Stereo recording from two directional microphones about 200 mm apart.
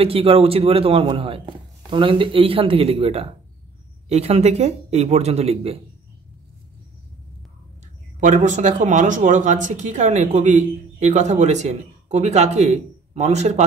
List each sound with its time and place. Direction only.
0.0 s speech: 30° right (ahead or behind)
8.2 s speech: 35° right (ahead or behind)